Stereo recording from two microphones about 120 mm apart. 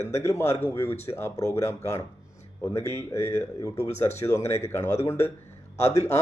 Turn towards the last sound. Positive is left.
turn(degrees=25)  # may be behind; listen again after turning